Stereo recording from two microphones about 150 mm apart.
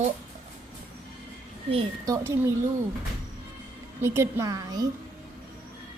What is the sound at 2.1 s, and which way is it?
Speech, 20° right (ahead or behind).